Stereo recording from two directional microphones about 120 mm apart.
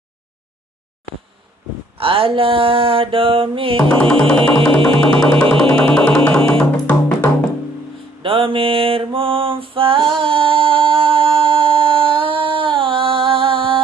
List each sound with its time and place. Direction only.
2.0 s mantra: 50° right (ahead or behind)
3.8 s music: 10° left (ahead or behind)
8.2 s mantra: 45° right (ahead or behind)